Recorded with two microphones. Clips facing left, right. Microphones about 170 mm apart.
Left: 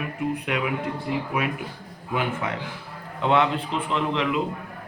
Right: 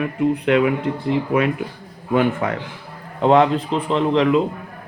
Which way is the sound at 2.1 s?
50° right (ahead or behind).